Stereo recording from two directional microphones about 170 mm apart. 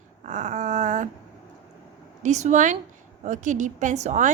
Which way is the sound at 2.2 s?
45° right (ahead or behind).